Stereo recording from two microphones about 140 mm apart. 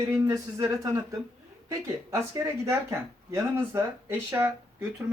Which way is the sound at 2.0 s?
20° right (ahead or behind).